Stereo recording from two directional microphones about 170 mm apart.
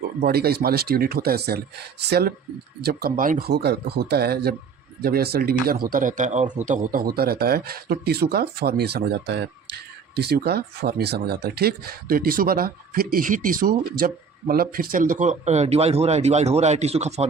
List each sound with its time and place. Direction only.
0.2 s speech: 65° right (ahead or behind); by 6.5 s 45° right (ahead or behind)
6.7 s speech: 60° right (ahead or behind); by 17.2 s 40° right (ahead or behind)